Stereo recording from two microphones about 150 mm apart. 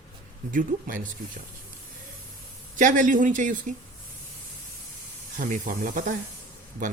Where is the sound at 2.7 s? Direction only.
60° right (ahead or behind).